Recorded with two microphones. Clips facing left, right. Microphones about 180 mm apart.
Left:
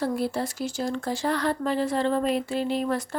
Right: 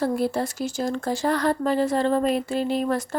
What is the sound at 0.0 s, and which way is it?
Speech, 45° right (ahead or behind).